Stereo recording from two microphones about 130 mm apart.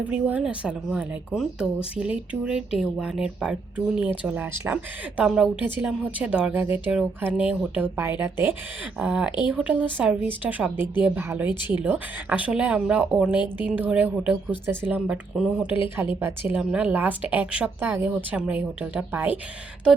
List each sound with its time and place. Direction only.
0.0 s speech: 10° right (ahead or behind)